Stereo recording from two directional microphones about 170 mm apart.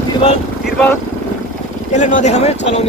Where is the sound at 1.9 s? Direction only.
45° left (ahead or behind).